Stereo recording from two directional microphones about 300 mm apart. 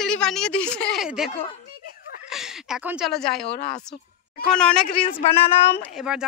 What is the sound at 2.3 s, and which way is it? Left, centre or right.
A woman's voice, centre.